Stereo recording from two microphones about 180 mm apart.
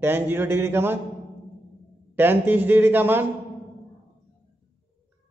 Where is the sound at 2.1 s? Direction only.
10° right (ahead or behind).